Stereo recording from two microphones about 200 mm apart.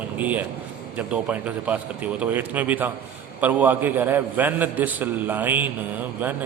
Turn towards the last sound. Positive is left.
turn(degrees=-10)  # may be behind; listen again after turning